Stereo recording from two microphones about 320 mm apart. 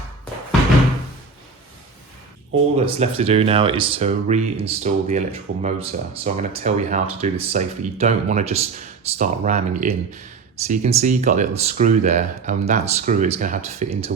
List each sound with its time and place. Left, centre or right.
2.7 s speech: centre